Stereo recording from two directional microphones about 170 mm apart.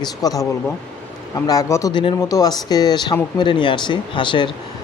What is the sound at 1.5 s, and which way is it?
Speech, 20° left (ahead or behind).